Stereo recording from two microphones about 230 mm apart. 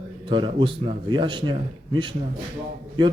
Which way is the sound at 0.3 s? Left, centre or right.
Right.